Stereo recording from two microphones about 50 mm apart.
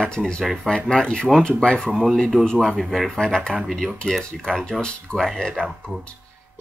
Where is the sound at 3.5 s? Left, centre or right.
Centre.